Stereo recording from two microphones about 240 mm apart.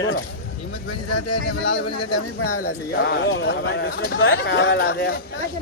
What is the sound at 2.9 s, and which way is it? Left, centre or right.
Speech, left.